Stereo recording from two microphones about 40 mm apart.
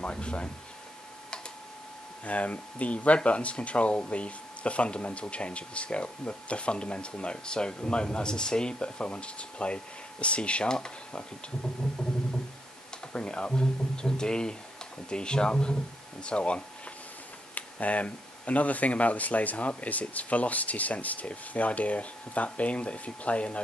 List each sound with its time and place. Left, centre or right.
0.0 s speech: left
2.2 s speech: left
13.1 s speech: left